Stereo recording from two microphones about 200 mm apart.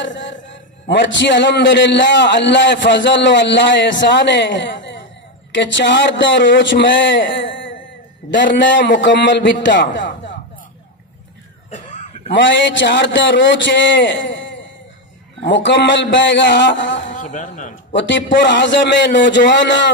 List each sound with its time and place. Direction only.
0.0 s a man's voice: 65° left (ahead or behind)
12.3 s a man's voice: 65° left (ahead or behind)
17.1 s speech: 40° left (ahead or behind)
17.9 s a man's voice: 65° left (ahead or behind)